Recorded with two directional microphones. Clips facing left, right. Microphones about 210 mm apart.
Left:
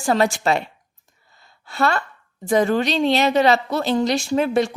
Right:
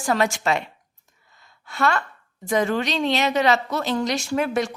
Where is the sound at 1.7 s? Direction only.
35° left (ahead or behind).